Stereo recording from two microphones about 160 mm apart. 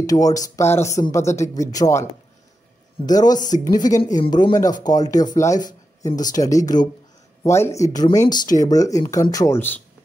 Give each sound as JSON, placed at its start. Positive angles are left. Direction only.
{"t": 0.0, "sound": "speech", "side_deg": 20}
{"t": 3.1, "sound": "speech", "side_deg": 25}
{"t": 3.4, "sound": "speech", "side_deg": 50}
{"t": 4.2, "sound": "speech", "side_deg": 25}
{"t": 5.6, "sound": "a sound", "side_deg": 55}
{"t": 6.2, "sound": "speech", "side_deg": 20}